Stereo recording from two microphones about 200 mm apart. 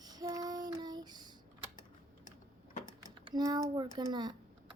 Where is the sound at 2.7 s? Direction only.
40° left (ahead or behind).